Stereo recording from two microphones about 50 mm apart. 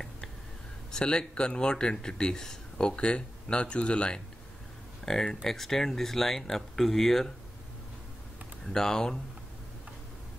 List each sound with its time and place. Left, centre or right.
0.9 s speech: centre
3.0 s speech: left
5.0 s speech: centre
8.7 s speech: centre